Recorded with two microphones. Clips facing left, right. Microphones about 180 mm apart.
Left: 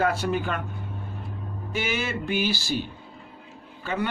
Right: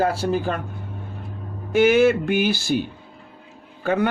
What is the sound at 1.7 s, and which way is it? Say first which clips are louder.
Speech: right 14 dB; 55° right (ahead or behind).